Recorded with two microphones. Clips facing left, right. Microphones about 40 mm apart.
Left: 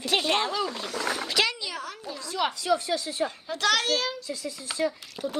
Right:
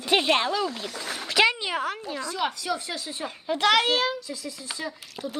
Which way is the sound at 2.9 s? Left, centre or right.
Centre.